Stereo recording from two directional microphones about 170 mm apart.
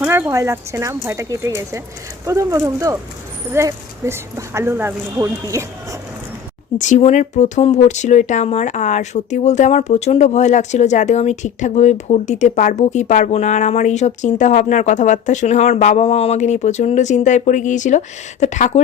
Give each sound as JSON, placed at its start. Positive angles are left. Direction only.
{"t": 0.0, "sound": "speech", "side_deg": -15}
{"t": 6.7, "sound": "speech", "side_deg": 45}